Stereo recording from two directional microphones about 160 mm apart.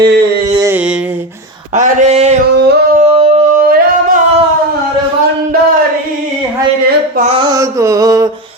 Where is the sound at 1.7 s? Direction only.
50° right (ahead or behind).